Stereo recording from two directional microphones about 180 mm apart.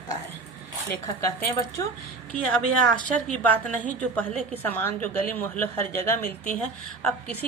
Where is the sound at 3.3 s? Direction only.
5° left (ahead or behind).